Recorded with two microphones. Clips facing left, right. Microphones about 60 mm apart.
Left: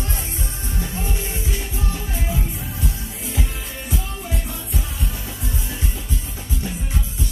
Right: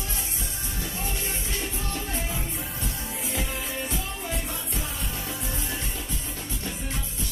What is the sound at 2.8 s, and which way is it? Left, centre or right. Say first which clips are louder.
Music: left 3 dB; centre.